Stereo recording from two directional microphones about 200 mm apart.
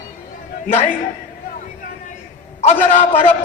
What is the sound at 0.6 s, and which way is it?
Speech, 35° left (ahead or behind).